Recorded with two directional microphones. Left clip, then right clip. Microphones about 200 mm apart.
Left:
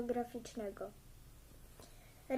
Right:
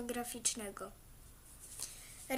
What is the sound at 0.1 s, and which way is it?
Speech, 40° right (ahead or behind).